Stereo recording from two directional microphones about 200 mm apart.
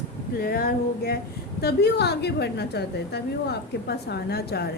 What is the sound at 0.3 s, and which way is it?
A woman's voice, 45° left (ahead or behind).